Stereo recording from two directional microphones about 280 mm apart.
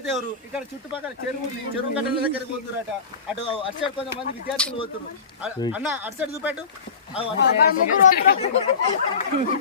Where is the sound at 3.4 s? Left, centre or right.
Centre.